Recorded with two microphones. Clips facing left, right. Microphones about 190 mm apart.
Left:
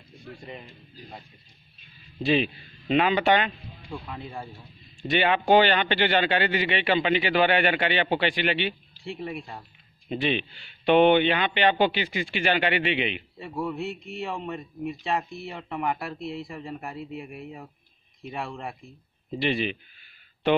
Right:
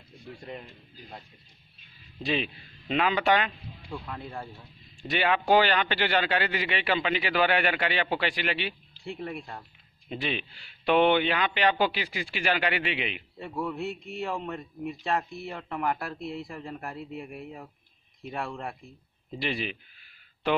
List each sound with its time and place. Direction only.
2.2 s speech: centre (ahead or behind)
9.2 s speech: 10° left (ahead or behind)